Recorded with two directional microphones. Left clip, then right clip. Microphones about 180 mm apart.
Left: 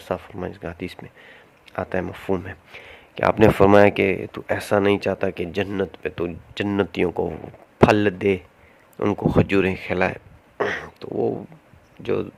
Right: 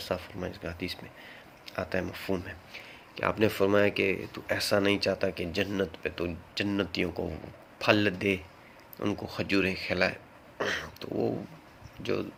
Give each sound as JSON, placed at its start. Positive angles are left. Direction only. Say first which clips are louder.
{"t": 0.1, "sound": "speech", "louder": "left 8 dB", "side_deg": 40}